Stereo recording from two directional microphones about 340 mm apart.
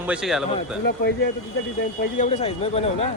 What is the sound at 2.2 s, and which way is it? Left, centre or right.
Speech, centre.